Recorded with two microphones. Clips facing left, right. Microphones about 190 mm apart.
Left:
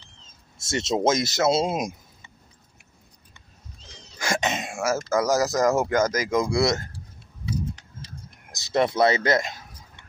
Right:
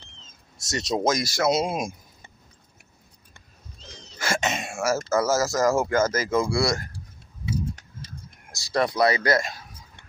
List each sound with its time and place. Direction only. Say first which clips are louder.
0.6 s speech: left 2 dB; 25° left (ahead or behind)
4.2 s wail: left 1 dB; 15° left (ahead or behind)
5.1 s speech: left 2 dB; 15° left (ahead or behind)
8.5 s speech: left 2 dB; 20° left (ahead or behind)